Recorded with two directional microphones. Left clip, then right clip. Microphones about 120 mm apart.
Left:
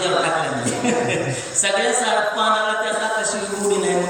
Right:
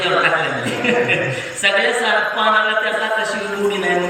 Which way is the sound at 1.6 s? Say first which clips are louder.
Right 4 dB; 25° left (ahead or behind).